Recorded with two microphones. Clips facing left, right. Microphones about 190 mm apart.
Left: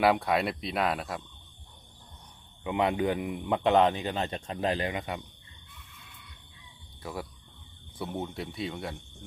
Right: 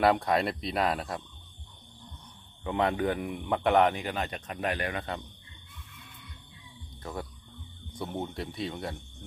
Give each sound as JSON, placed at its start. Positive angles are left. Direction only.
{"t": 0.0, "sound": "speech", "side_deg": 5}
{"t": 2.6, "sound": "speech", "side_deg": 15}
{"t": 7.0, "sound": "speech", "side_deg": 5}